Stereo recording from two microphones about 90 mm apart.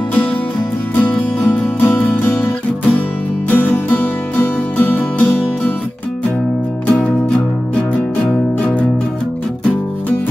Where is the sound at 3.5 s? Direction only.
15° left (ahead or behind).